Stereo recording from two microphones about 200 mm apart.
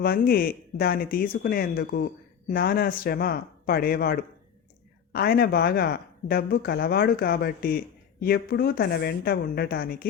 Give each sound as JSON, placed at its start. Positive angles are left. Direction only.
{"t": 0.0, "sound": "a woman's voice", "side_deg": 50}